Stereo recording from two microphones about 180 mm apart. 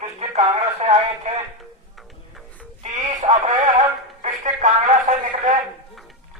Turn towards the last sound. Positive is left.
turn(degrees=-40)  # may be behind; listen again after turning